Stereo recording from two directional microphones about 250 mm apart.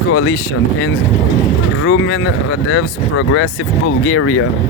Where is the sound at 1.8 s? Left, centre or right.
Left.